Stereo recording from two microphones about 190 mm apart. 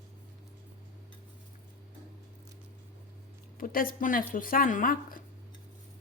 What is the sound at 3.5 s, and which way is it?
A woman's voice, 50° left (ahead or behind).